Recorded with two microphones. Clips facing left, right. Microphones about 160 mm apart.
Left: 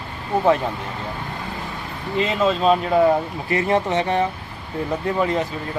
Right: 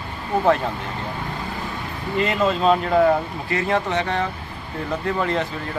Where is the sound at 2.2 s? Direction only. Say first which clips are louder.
Left 1 dB; centre (ahead or behind).